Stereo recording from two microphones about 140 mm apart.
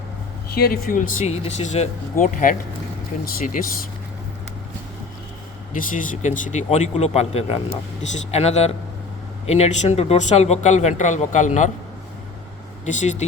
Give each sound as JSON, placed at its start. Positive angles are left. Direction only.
{"t": 0.7, "sound": "speech", "side_deg": 90}
{"t": 5.7, "sound": "speech", "side_deg": 70}
{"t": 12.8, "sound": "speech", "side_deg": 60}